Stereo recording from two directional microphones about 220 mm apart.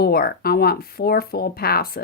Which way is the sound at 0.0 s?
45° left (ahead or behind).